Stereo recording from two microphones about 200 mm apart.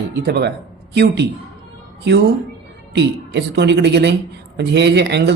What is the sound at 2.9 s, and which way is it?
Speech, 60° right (ahead or behind).